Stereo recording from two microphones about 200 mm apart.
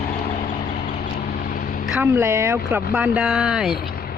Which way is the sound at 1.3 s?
45° left (ahead or behind).